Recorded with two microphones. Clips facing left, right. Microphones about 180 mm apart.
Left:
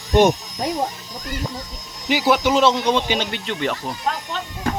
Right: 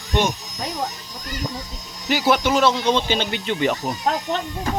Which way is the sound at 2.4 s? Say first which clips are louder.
Left 1 dB; 20° left (ahead or behind).